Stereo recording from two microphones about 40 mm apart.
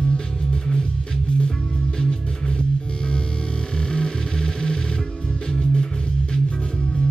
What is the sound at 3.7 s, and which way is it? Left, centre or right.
Music, left.